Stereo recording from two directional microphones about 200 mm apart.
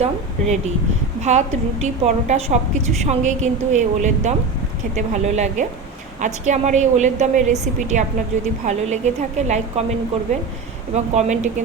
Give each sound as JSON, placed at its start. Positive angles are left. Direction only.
{"t": 0.0, "sound": "a woman's voice", "side_deg": -35}
{"t": 10.9, "sound": "a woman's voice", "side_deg": -35}